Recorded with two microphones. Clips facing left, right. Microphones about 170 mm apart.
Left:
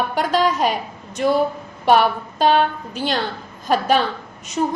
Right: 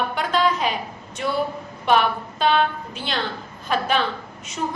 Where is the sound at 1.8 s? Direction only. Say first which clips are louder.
Left 4 dB; 40° left (ahead or behind).